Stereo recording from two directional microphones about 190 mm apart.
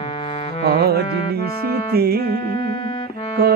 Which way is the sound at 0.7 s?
55° right (ahead or behind).